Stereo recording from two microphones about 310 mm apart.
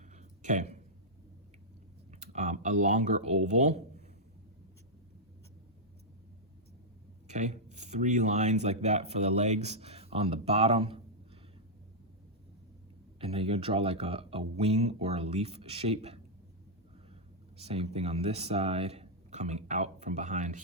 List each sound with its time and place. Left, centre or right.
0.0 s a sound: right
2.2 s speech: right
7.3 s speech: right
13.1 s speech: centre
17.6 s speech: centre